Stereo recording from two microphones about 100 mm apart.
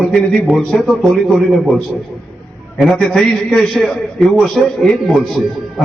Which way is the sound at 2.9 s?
10° left (ahead or behind).